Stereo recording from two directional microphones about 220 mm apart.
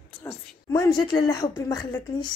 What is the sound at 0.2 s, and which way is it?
A woman's voice, 15° left (ahead or behind).